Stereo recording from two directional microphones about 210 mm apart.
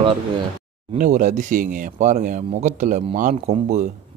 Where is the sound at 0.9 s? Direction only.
40° right (ahead or behind).